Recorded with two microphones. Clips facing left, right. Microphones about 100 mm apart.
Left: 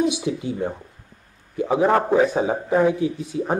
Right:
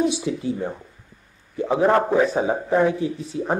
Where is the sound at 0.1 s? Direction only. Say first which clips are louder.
Right 1 dB; 15° left (ahead or behind).